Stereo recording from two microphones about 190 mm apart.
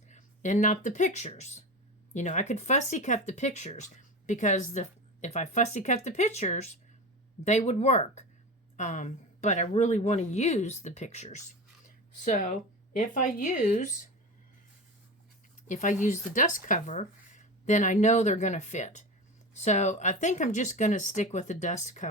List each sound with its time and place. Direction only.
0.1 s speech: 40° left (ahead or behind)
15.6 s speech: 40° left (ahead or behind)